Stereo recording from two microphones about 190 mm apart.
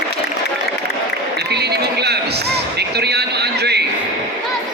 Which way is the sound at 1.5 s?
60° right (ahead or behind).